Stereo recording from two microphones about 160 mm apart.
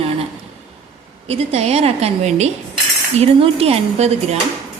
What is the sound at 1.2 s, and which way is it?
A woman's voice, 40° right (ahead or behind).